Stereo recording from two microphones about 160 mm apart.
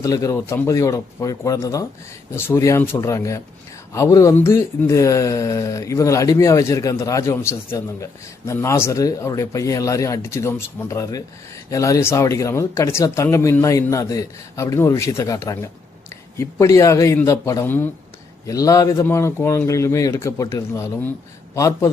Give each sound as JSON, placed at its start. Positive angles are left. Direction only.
{"t": 0.0, "sound": "a man's voice", "side_deg": 20}